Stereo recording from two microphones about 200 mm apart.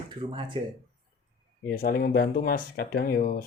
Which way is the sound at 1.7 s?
50° left (ahead or behind).